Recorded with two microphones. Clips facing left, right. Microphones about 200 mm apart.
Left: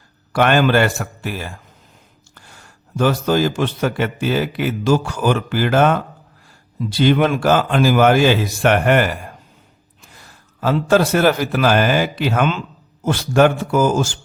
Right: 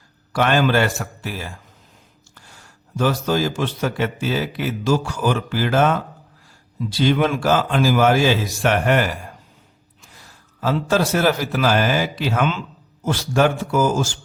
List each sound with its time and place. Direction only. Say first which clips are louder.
0.3 s a man's voice: left 3 dB; 60° left (ahead or behind)
10.6 s a man's voice: left 4 dB; 55° left (ahead or behind)